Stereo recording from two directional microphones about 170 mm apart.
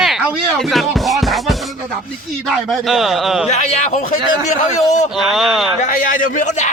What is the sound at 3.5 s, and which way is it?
A man's voice, 40° left (ahead or behind).